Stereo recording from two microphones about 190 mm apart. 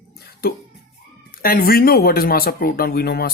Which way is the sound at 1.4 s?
50° left (ahead or behind).